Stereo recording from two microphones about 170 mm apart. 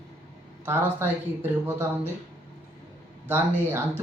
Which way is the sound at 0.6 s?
15° right (ahead or behind).